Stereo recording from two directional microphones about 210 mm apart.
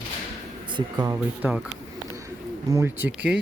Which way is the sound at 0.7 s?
20° right (ahead or behind).